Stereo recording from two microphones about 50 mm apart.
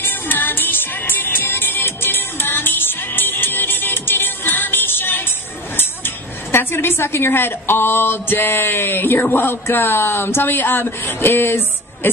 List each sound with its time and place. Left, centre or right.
0.0 s music: left
5.8 s speech: left